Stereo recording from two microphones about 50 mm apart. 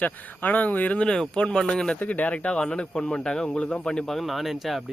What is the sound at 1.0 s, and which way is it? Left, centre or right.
Speech, centre.